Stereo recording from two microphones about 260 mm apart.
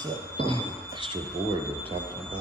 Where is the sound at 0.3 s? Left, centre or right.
Centre.